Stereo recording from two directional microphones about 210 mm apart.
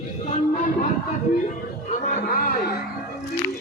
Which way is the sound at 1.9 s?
35° left (ahead or behind).